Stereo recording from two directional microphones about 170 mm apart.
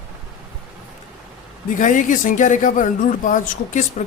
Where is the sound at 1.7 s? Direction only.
50° left (ahead or behind).